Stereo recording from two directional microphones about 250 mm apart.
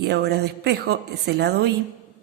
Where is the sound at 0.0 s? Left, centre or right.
Right.